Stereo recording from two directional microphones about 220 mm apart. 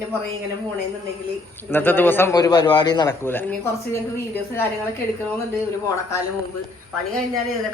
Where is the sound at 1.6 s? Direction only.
10° left (ahead or behind).